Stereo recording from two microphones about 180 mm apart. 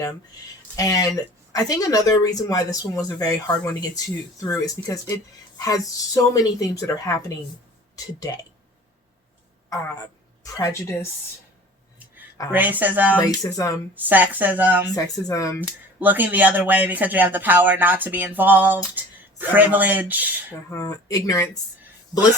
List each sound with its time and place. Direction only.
0.8 s speech: 20° left (ahead or behind)
10.4 s speech: 15° left (ahead or behind)
12.5 s speech: 10° right (ahead or behind)
13.1 s speech: 20° left (ahead or behind)
13.9 s speech: 10° right (ahead or behind)
14.8 s speech: 20° left (ahead or behind)
16.0 s speech: 10° right (ahead or behind)
20.7 s speech: 20° left (ahead or behind)